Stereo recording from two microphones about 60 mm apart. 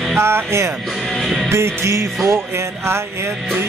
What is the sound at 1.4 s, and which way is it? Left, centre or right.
Music, right.